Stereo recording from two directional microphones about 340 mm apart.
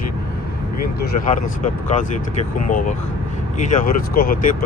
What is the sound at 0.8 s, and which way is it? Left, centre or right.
Speech, left.